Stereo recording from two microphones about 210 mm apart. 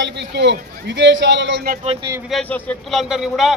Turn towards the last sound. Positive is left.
turn(degrees=0)  # may be behind; listen again after turning